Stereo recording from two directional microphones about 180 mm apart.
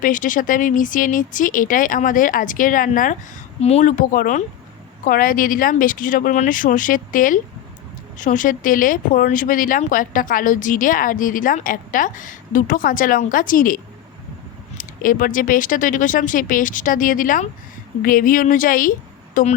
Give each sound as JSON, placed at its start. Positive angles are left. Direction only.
{"t": 0.0, "sound": "speech", "side_deg": 45}
{"t": 3.6, "sound": "speech", "side_deg": 35}